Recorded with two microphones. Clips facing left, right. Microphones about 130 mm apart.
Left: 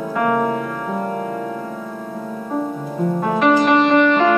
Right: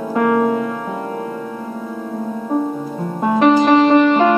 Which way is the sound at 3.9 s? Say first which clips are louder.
Right 2 dB; 30° right (ahead or behind).